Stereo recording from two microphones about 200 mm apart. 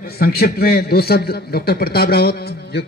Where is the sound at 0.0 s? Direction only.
50° left (ahead or behind).